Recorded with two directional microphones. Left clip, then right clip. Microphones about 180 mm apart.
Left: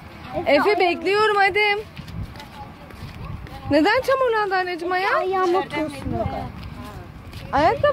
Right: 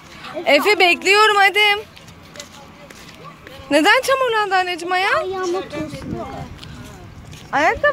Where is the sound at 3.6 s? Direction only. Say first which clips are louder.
Right 4 dB; 5° right (ahead or behind).